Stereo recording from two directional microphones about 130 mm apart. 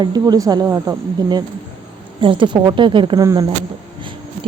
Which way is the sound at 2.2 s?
40° right (ahead or behind).